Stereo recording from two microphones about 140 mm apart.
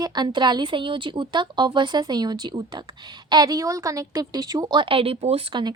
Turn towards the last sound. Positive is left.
turn(degrees=-40)  # may be behind; listen again after turning